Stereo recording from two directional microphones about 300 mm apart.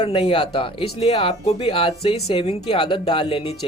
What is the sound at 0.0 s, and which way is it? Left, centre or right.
Speech, centre.